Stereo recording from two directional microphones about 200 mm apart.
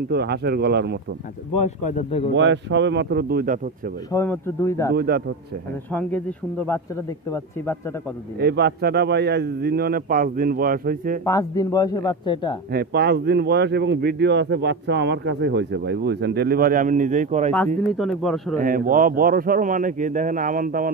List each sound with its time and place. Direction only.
0.1 s speech: 55° right (ahead or behind)
1.6 s speech: 35° left (ahead or behind)
2.3 s speech: 60° right (ahead or behind)
4.1 s speech: 15° left (ahead or behind)
4.9 s a man's voice: 50° right (ahead or behind)
5.9 s speech: 10° left (ahead or behind)
8.4 s a man's voice: 55° right (ahead or behind)
11.2 s speech: 15° left (ahead or behind)
12.7 s speech: 55° right (ahead or behind); by 17.5 s 40° right (ahead or behind)
17.9 s speech: centre (ahead or behind)
18.6 s a man's voice: 45° right (ahead or behind)